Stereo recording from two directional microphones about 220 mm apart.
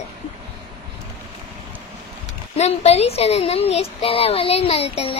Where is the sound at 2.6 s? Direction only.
30° left (ahead or behind).